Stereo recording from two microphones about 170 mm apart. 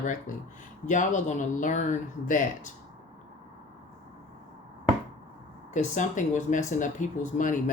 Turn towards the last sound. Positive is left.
turn(degrees=50)  # may be behind; listen again after turning